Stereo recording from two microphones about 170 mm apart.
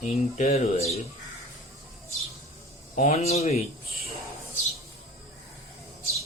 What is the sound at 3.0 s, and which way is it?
Speech, 40° left (ahead or behind).